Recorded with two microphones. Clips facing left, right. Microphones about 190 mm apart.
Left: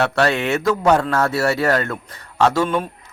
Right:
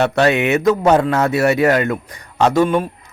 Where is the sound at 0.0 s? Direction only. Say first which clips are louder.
Right 4 dB; 20° right (ahead or behind).